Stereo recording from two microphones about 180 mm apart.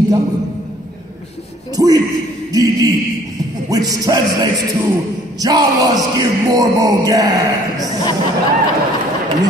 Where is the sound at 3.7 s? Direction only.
20° right (ahead or behind).